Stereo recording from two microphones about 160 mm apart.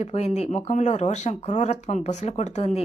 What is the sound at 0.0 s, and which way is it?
Speech, 45° left (ahead or behind).